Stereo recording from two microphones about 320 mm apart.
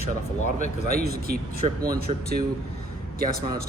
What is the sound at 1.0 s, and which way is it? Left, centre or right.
Speech, right.